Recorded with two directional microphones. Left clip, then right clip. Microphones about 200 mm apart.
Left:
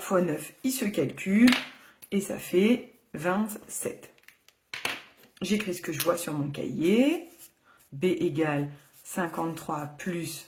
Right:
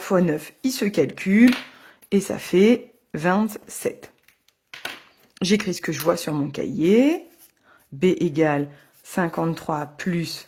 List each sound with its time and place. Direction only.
0.0 s speech: 35° right (ahead or behind)
5.3 s speech: 45° right (ahead or behind)